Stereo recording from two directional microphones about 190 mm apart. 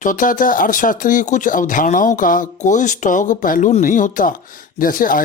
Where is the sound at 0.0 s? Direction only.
45° left (ahead or behind).